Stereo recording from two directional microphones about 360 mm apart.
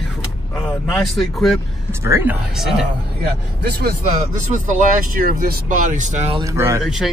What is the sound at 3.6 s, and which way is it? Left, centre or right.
Speech, right.